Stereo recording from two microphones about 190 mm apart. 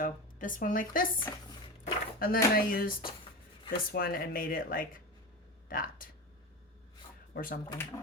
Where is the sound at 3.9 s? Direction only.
50° left (ahead or behind).